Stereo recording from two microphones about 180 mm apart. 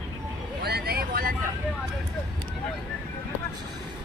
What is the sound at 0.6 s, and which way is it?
Vehicle, 60° right (ahead or behind).